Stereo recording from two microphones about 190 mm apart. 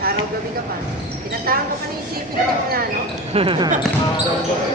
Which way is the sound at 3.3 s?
30° right (ahead or behind).